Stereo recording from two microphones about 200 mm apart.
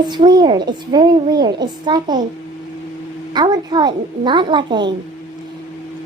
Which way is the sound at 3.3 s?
20° right (ahead or behind).